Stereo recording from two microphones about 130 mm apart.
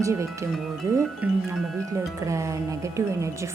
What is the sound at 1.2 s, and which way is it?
Speech, 10° right (ahead or behind).